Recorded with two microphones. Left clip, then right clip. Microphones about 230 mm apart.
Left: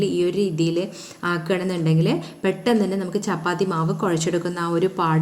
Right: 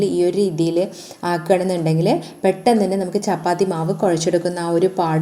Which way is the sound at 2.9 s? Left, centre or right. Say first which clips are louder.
Right 5 dB; centre.